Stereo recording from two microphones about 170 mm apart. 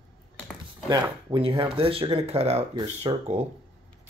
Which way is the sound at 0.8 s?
25° right (ahead or behind).